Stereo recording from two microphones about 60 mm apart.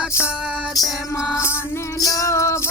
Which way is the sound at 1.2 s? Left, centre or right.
Left.